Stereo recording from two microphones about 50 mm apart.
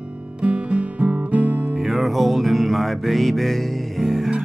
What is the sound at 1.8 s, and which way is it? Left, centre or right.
Music, centre.